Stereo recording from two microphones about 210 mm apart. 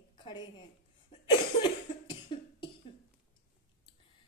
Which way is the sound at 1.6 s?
20° left (ahead or behind).